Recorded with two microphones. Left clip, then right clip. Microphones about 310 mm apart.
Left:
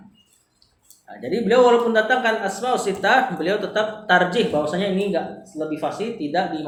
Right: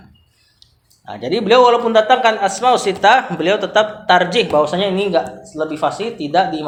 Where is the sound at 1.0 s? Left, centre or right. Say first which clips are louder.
Right 6 dB; right.